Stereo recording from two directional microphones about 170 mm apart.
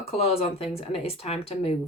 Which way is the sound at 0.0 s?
35° left (ahead or behind).